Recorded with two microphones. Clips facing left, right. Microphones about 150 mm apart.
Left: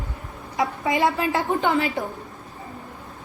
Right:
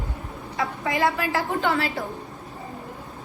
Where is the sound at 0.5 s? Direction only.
20° left (ahead or behind).